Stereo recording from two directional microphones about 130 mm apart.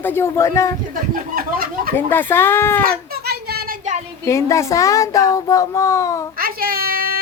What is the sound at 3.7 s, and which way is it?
Child singing, 70° right (ahead or behind).